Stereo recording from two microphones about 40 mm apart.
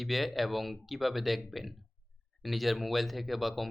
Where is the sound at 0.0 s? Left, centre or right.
Centre.